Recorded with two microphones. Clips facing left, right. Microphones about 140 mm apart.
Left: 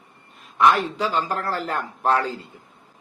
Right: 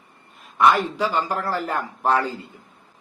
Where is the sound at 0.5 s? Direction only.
Centre (ahead or behind).